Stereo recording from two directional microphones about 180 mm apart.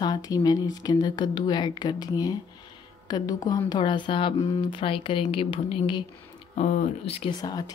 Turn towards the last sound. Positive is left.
turn(degrees=20)  # may be behind; listen again after turning